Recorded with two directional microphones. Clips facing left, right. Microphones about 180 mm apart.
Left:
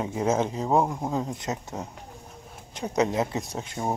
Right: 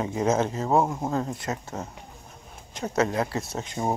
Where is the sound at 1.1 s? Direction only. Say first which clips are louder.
Right 1 dB; 15° left (ahead or behind).